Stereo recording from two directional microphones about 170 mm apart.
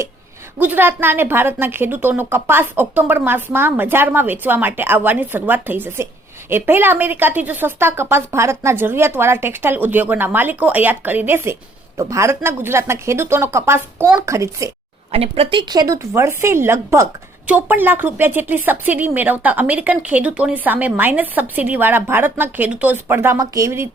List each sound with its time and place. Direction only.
0.6 s speech: 10° right (ahead or behind)
15.1 s speech: 35° right (ahead or behind); by 23.9 s 15° right (ahead or behind)